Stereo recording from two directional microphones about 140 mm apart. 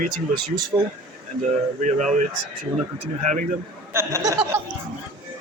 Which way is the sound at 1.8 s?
60° right (ahead or behind).